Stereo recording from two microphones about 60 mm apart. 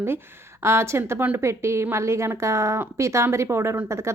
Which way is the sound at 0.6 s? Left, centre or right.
Right.